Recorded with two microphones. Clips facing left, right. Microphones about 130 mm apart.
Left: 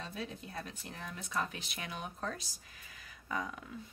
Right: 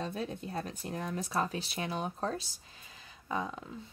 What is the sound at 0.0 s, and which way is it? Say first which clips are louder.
Speech: right 6 dB; 45° right (ahead or behind).